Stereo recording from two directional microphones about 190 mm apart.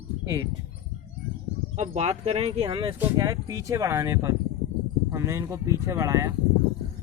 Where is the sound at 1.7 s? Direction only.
35° right (ahead or behind); by 6.3 s 15° right (ahead or behind).